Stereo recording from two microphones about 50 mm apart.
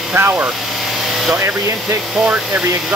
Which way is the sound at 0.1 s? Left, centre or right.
Right.